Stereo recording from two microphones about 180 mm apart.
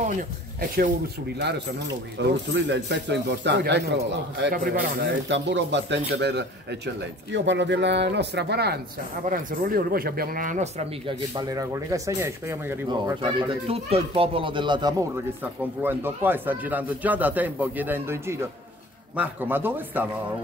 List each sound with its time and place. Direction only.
0.6 s a man's voice: 55° right (ahead or behind)
2.2 s speech: 75° right (ahead or behind)
7.3 s speech: 80° right
9.2 s a man's voice: 50° right (ahead or behind)
11.3 s speech: 20° right (ahead or behind)
15.4 s speech: 10° right (ahead or behind)